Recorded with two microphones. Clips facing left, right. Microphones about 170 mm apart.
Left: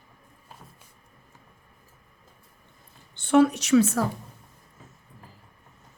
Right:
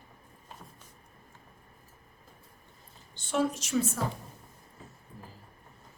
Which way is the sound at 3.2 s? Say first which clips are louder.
Left 10 dB; 65° left (ahead or behind).